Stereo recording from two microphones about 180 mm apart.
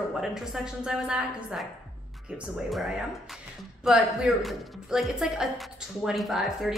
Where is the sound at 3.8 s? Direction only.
Centre (ahead or behind).